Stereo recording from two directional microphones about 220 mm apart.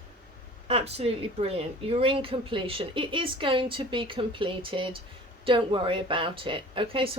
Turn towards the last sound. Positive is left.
turn(degrees=-25)  # may be behind; listen again after turning